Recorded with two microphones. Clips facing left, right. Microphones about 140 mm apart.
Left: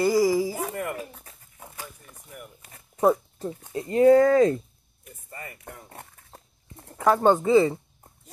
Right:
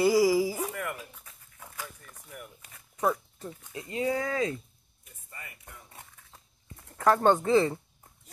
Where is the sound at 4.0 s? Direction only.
55° left (ahead or behind).